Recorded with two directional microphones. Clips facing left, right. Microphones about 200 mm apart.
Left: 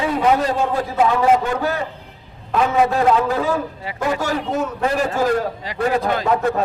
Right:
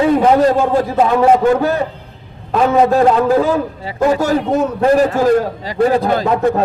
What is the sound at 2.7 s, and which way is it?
A man's voice, 40° right (ahead or behind).